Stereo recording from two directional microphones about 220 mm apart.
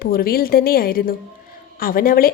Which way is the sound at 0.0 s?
45° left (ahead or behind).